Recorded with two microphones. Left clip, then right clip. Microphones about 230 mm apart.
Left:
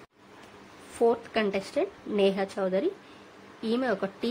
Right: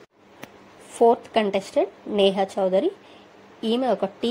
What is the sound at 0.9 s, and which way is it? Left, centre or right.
A woman's voice, centre.